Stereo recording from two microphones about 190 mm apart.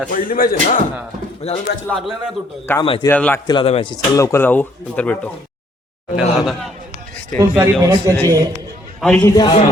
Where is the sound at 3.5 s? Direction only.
30° left (ahead or behind).